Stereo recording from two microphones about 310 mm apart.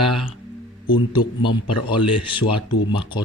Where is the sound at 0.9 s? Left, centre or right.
Centre.